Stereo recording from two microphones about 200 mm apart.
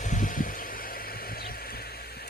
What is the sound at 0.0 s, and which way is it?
Vehicle, 40° left (ahead or behind).